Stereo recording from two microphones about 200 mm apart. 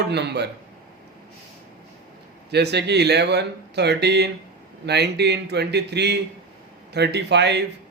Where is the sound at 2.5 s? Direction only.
55° right (ahead or behind).